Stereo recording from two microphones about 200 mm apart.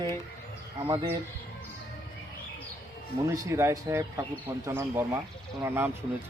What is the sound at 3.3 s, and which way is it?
Speech, 15° right (ahead or behind).